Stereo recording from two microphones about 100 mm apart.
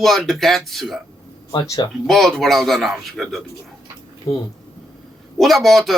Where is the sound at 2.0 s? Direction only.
5° left (ahead or behind).